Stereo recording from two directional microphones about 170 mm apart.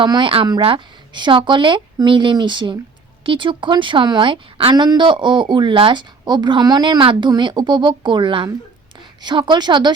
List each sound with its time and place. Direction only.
0.0 s a woman's voice: 30° right (ahead or behind)